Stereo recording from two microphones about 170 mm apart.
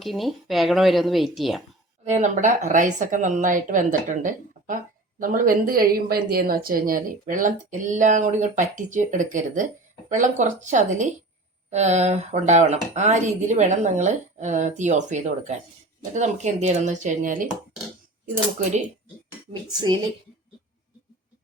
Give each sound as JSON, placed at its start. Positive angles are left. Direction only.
{"t": 0.0, "sound": "speech", "side_deg": 0}
{"t": 2.0, "sound": "a woman's voice", "side_deg": -45}